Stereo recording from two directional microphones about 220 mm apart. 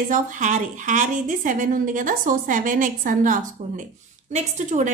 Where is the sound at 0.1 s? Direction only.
35° right (ahead or behind).